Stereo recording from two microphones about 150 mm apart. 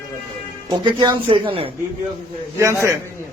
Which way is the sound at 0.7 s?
30° right (ahead or behind).